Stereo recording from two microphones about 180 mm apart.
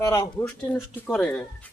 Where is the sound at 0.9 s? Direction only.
10° left (ahead or behind).